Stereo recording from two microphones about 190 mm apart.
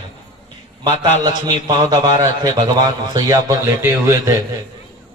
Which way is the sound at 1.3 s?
40° left (ahead or behind).